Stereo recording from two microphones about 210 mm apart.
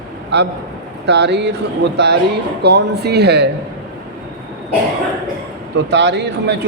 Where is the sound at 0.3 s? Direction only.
55° right (ahead or behind).